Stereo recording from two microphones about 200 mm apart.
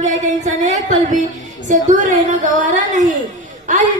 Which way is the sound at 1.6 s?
40° right (ahead or behind).